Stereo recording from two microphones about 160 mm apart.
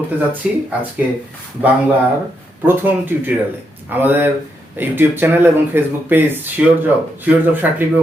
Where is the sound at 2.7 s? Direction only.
10° right (ahead or behind).